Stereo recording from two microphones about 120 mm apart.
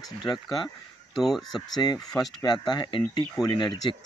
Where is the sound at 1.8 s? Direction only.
35° left (ahead or behind).